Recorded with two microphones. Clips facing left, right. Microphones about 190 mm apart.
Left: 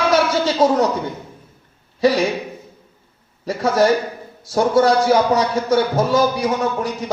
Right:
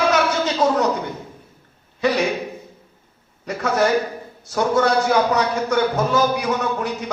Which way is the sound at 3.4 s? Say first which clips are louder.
Left 3 dB; 35° left (ahead or behind).